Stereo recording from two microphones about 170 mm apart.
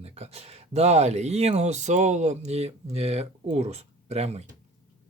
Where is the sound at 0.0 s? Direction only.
35° right (ahead or behind).